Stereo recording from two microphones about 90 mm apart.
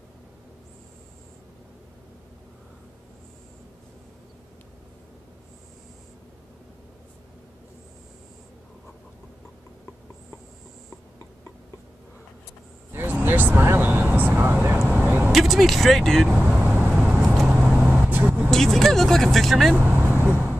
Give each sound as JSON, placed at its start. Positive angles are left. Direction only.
{"t": 12.9, "sound": "vehicle", "side_deg": -20}
{"t": 15.3, "sound": "speech", "side_deg": 0}
{"t": 16.3, "sound": "speech", "side_deg": -10}
{"t": 17.0, "sound": "vehicle", "side_deg": -10}
{"t": 18.5, "sound": "speech", "side_deg": 5}
{"t": 19.8, "sound": "vehicle", "side_deg": -20}